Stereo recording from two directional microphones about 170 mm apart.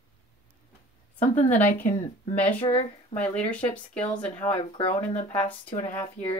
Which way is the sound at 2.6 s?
40° left (ahead or behind).